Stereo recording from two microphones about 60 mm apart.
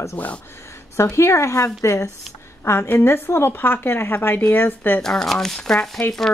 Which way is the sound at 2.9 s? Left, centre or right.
Left.